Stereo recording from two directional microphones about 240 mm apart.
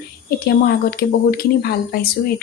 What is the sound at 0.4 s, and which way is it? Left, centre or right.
Speech, left.